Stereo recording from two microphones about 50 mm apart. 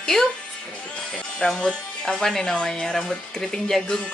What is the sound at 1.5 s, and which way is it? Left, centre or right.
Speech, centre.